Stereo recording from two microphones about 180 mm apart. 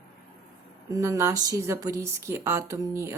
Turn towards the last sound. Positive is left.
turn(degrees=-15)  # may be behind; listen again after turning